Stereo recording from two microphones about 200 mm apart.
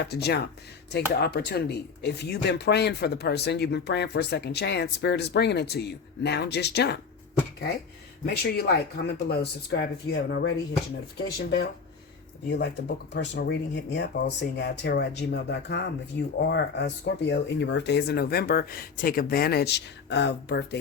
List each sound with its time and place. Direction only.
0.0 s speech: 55° left (ahead or behind)
8.2 s speech: 50° left (ahead or behind)
12.5 s speech: 50° left (ahead or behind)